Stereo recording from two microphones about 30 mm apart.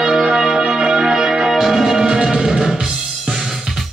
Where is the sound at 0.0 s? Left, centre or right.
Right.